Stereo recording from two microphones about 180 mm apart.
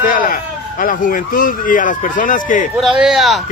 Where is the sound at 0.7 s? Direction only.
50° left (ahead or behind).